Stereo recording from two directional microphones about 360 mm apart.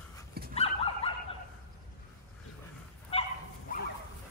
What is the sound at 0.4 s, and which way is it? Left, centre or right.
Dog, right.